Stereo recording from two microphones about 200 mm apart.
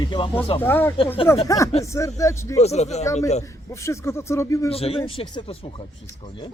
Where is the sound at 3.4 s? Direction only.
15° left (ahead or behind).